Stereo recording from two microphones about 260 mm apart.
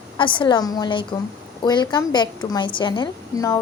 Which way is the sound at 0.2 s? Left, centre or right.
Centre.